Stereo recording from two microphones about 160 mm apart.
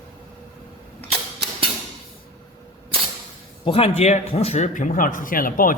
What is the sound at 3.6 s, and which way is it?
Speech, 35° left (ahead or behind).